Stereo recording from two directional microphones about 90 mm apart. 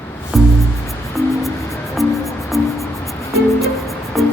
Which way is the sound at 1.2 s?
35° left (ahead or behind).